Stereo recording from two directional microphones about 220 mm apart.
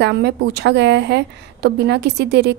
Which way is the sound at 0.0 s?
50° right (ahead or behind).